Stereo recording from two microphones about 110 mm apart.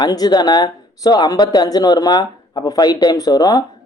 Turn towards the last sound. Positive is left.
turn(degrees=40)  # may be behind; listen again after turning